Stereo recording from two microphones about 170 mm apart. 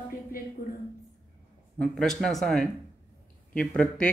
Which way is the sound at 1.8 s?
5° left (ahead or behind).